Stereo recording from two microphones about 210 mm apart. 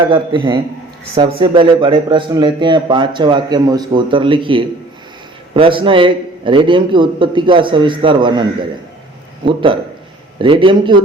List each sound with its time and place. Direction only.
0.1 s a man's voice: 20° right (ahead or behind)
9.5 s a man's voice: 25° right (ahead or behind)